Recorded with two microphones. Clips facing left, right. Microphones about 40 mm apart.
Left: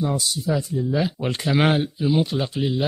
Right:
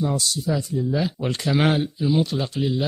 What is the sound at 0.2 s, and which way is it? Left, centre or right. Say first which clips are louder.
Speech: left 1 dB; centre.